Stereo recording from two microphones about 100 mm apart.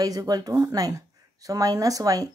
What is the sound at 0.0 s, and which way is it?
Speech, 35° right (ahead or behind).